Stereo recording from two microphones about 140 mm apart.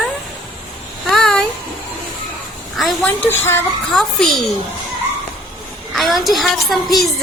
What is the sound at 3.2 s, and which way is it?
Speech, 15° left (ahead or behind).